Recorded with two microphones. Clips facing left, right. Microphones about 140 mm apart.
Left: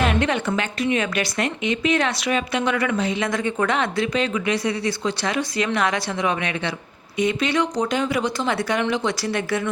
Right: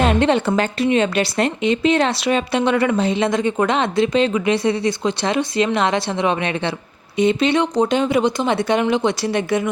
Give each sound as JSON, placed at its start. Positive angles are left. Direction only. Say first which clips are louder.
{"t": 0.0, "sound": "speech", "louder": "right 5 dB", "side_deg": -30}